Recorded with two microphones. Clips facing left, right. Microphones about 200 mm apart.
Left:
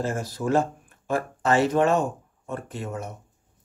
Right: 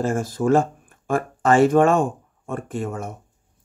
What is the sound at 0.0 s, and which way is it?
A man's voice, 50° right (ahead or behind).